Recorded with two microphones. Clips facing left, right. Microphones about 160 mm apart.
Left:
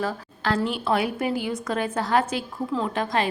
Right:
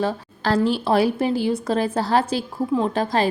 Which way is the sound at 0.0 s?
30° right (ahead or behind).